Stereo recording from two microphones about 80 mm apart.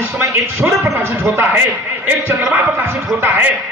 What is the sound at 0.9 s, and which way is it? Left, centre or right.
Music, right.